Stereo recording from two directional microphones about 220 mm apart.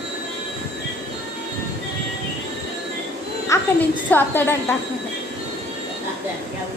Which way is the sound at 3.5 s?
15° left (ahead or behind).